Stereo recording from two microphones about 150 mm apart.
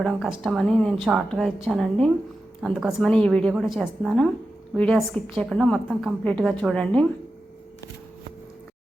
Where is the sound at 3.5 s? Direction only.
5° right (ahead or behind).